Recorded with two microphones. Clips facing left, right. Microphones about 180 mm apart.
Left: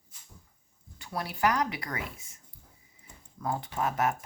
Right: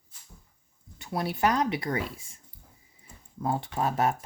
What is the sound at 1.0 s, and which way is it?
Dishes, 25° right (ahead or behind).